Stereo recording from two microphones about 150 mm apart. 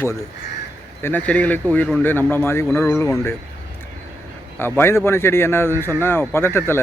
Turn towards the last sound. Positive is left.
turn(degrees=15)  # may be behind; listen again after turning